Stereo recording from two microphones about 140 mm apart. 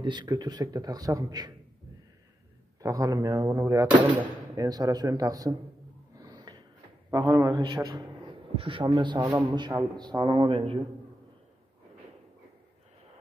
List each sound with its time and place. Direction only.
0.0 s a man's voice: 30° right (ahead or behind)
2.8 s a man's voice: 25° right (ahead or behind)
6.1 s a sound: 30° right (ahead or behind)
7.1 s a man's voice: 30° right (ahead or behind)